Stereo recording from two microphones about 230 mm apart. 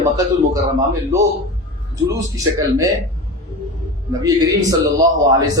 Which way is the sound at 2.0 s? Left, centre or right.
Centre.